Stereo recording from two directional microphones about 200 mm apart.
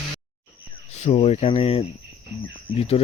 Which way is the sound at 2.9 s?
30° left (ahead or behind).